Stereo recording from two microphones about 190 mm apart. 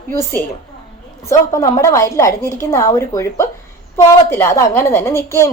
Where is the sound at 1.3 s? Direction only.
15° left (ahead or behind).